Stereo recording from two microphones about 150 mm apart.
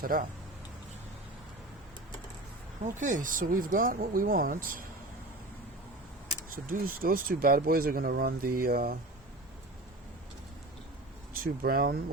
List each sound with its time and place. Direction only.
0.0 s speech: 70° right (ahead or behind)
2.8 s speech: 55° right (ahead or behind)
6.7 s speech: 75° right (ahead or behind)
11.3 s speech: 75° right (ahead or behind)